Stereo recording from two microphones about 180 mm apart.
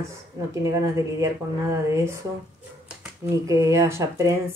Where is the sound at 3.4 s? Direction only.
15° right (ahead or behind).